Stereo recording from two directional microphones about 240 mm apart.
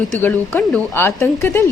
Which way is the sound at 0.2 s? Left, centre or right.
Centre.